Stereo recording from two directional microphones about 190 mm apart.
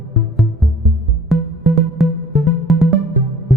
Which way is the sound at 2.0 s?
Centre (ahead or behind).